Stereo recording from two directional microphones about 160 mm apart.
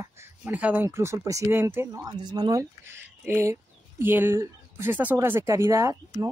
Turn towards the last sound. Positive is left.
turn(degrees=-20)  # may be behind; listen again after turning